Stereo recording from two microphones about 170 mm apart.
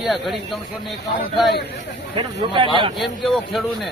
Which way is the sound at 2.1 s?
30° right (ahead or behind).